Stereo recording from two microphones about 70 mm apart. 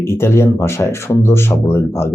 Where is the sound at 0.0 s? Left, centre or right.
Left.